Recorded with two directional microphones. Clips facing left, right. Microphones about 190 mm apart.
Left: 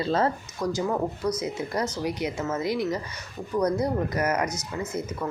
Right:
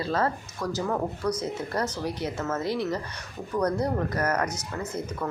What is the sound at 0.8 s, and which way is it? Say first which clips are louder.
Speech: right 1 dB; 10° left (ahead or behind).